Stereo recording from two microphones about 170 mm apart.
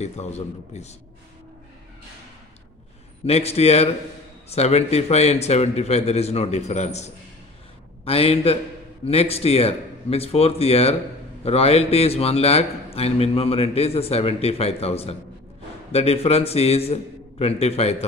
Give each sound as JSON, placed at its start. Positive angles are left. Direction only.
{"t": 0.0, "sound": "a man's voice", "side_deg": 40}
{"t": 3.3, "sound": "a man's voice", "side_deg": 40}